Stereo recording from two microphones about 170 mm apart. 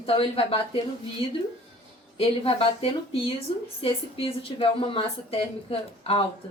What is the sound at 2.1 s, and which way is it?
A woman's voice, 35° left (ahead or behind).